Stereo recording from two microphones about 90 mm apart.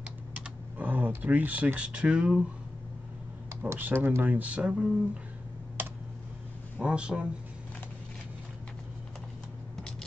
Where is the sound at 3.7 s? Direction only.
20° right (ahead or behind).